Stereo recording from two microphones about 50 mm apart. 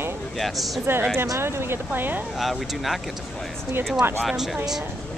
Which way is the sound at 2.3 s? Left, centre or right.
Centre.